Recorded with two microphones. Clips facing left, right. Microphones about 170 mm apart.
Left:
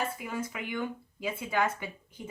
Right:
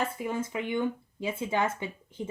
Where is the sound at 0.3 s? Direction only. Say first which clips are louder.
Right 5 dB; 25° right (ahead or behind).